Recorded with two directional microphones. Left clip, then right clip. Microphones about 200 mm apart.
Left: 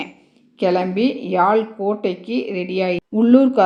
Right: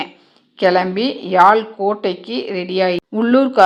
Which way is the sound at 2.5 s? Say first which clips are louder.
Right 5 dB; 5° right (ahead or behind).